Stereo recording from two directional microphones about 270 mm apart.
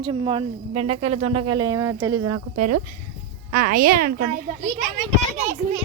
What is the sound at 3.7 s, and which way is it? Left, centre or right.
Speech, right.